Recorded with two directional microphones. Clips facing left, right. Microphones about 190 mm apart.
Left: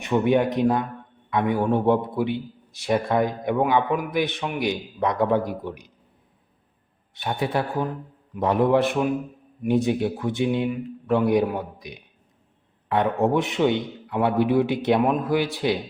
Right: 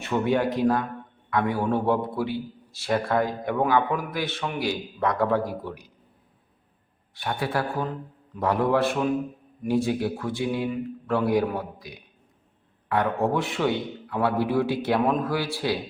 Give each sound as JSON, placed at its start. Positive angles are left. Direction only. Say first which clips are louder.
{"t": 0.0, "sound": "a man's voice", "louder": "left 3 dB", "side_deg": 20}
{"t": 7.1, "sound": "a man's voice", "louder": "left 2 dB", "side_deg": 20}